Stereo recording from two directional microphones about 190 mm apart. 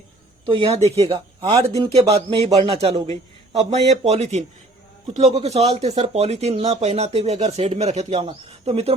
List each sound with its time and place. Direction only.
0.4 s speech: 25° right (ahead or behind)
1.4 s speech: 15° right (ahead or behind)
1.8 s speech: 30° right (ahead or behind)